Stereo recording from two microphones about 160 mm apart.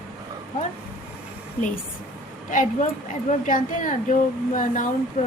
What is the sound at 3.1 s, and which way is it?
Speech, 55° left (ahead or behind).